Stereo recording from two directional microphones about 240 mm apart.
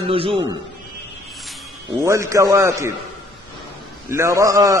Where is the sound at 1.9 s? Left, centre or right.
Centre.